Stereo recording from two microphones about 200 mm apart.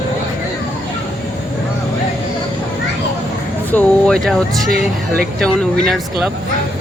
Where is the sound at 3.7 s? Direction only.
5° left (ahead or behind).